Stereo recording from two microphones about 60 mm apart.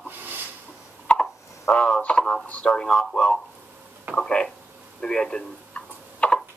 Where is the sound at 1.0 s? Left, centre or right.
Centre.